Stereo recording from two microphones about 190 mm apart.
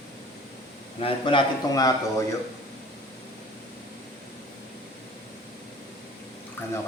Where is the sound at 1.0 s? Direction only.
30° left (ahead or behind).